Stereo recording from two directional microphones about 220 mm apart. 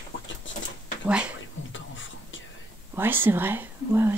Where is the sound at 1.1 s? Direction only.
5° right (ahead or behind).